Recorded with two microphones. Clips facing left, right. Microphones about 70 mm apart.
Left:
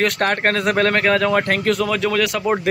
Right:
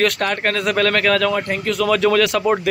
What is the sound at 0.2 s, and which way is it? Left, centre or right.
Speech, left.